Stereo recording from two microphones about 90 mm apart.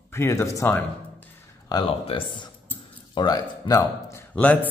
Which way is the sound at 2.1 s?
80° left.